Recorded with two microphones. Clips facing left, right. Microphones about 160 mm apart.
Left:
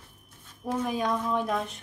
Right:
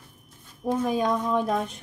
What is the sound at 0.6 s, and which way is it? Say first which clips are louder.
Speech: right 4 dB; 20° right (ahead or behind).